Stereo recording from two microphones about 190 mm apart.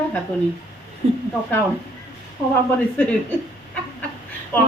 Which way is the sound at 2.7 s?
5° left (ahead or behind).